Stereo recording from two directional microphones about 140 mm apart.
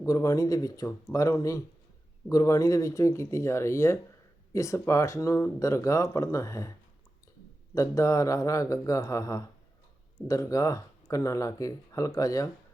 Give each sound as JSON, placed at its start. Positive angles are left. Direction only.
{"t": 0.0, "sound": "speech", "side_deg": 25}
{"t": 7.8, "sound": "speech", "side_deg": 25}